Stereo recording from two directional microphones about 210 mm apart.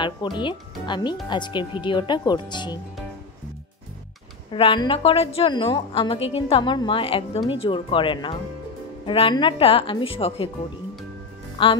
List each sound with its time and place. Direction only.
0.0 s a woman's voice: 20° left (ahead or behind)
4.5 s a woman's voice: 25° left (ahead or behind)
11.6 s a woman's voice: 25° left (ahead or behind)